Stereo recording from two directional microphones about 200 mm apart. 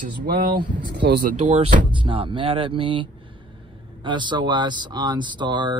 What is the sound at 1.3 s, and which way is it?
Speech, 30° right (ahead or behind).